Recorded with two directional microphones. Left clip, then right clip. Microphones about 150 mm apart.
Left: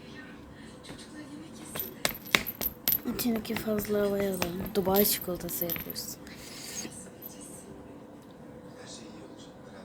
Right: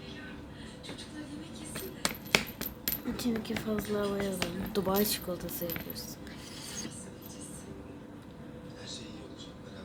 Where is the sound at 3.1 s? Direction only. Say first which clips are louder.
Left 2 dB; 25° left (ahead or behind).